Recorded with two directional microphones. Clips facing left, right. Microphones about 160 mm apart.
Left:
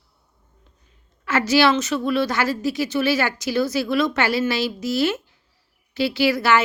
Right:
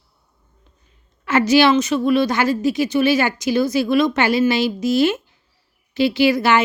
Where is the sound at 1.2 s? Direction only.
20° right (ahead or behind).